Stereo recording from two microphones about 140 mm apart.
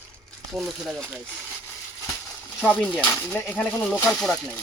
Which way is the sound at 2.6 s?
10° left (ahead or behind).